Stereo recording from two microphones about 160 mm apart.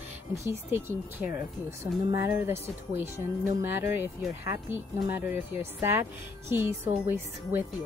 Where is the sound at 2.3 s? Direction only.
15° right (ahead or behind).